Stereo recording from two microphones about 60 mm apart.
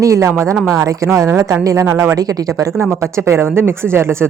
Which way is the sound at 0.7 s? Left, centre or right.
Right.